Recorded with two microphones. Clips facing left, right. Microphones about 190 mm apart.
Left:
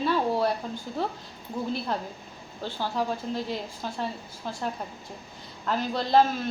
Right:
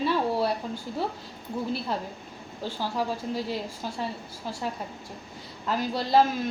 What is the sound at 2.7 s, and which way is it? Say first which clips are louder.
Speech: even; 10° right (ahead or behind).